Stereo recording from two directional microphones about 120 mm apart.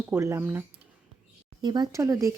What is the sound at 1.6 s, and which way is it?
Speech, 35° right (ahead or behind).